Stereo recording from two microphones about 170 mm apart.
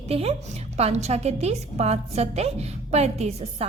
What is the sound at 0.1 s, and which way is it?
A woman's voice, 35° right (ahead or behind).